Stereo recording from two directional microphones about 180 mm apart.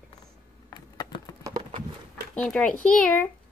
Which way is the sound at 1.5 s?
25° right (ahead or behind).